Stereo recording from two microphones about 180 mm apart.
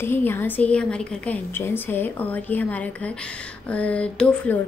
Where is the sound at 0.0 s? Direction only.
10° left (ahead or behind).